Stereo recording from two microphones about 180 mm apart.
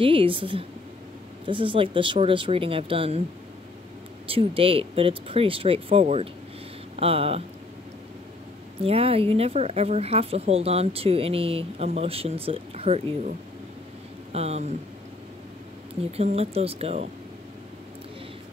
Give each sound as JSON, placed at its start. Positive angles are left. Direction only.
{"t": 0.0, "sound": "speech", "side_deg": -30}
{"t": 4.3, "sound": "speech", "side_deg": -30}
{"t": 8.8, "sound": "speech", "side_deg": -35}
{"t": 14.3, "sound": "speech", "side_deg": -35}
{"t": 16.1, "sound": "speech", "side_deg": -35}